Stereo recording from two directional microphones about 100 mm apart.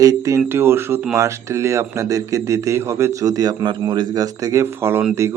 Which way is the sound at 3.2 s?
40° right (ahead or behind).